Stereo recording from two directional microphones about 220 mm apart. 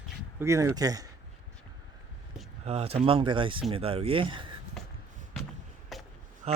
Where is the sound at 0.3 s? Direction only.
15° right (ahead or behind).